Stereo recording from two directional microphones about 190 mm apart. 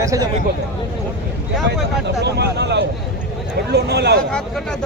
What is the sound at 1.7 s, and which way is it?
Speech, 60° right (ahead or behind).